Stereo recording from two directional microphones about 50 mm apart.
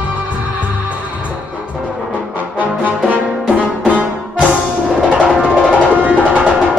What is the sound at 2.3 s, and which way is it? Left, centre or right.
Brass instrument, right.